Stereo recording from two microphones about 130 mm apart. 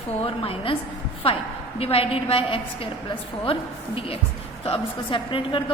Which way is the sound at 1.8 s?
45° left (ahead or behind).